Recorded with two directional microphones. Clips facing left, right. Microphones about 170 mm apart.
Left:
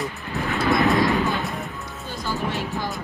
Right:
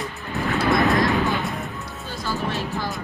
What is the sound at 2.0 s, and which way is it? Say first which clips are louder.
Music: even; 15° left (ahead or behind).